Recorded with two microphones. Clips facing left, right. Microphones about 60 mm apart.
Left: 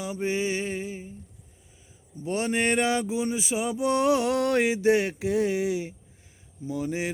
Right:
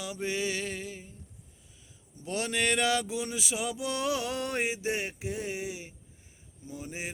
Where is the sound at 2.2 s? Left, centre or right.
Left.